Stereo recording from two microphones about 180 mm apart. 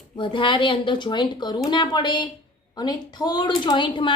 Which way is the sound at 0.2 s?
25° left (ahead or behind).